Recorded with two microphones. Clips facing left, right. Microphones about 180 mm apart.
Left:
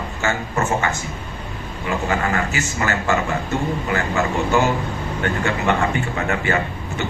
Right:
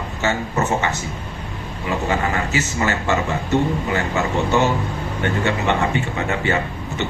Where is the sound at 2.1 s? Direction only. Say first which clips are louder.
Right 1 dB; 20° right (ahead or behind).